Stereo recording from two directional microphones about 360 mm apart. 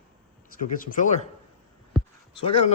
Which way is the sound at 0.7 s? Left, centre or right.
Left.